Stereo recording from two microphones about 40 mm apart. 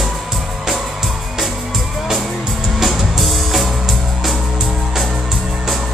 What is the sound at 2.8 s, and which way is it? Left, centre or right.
Music, centre.